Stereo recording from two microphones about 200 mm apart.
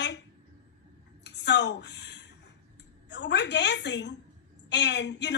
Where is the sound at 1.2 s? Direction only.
60° left (ahead or behind).